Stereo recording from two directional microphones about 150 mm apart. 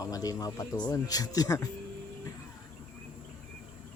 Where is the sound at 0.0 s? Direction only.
25° left (ahead or behind).